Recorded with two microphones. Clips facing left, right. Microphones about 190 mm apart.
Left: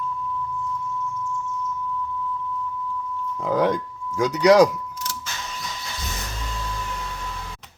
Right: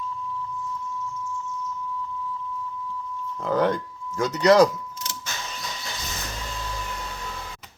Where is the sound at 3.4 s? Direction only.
10° left (ahead or behind).